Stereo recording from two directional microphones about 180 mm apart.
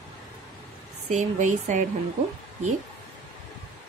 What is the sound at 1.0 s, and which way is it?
Speech, 40° right (ahead or behind).